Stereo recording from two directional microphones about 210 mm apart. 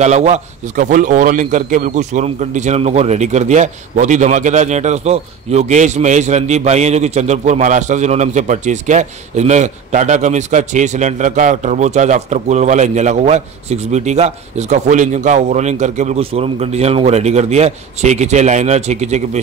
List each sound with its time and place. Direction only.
0.0 s a man's voice: 35° right (ahead or behind)